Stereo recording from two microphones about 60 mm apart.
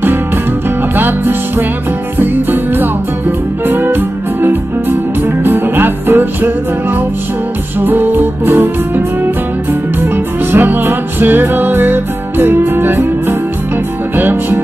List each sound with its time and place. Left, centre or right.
0.9 s music: right
7.8 s music: right
14.1 s music: right